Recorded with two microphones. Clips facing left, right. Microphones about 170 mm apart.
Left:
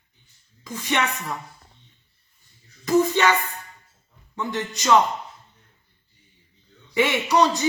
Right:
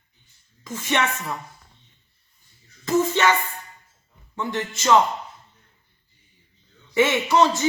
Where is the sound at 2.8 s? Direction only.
15° left (ahead or behind).